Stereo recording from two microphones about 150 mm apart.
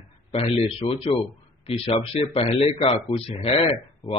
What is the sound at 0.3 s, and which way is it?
A man's voice, 40° left (ahead or behind).